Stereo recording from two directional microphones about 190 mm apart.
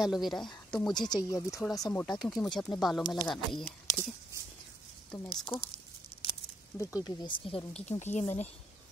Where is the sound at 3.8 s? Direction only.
15° left (ahead or behind).